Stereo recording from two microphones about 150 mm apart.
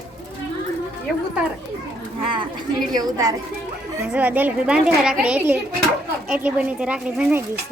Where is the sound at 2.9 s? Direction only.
25° right (ahead or behind).